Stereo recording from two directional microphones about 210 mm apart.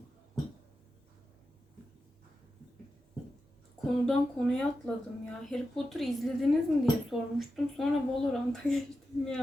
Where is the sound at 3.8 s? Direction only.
Centre (ahead or behind).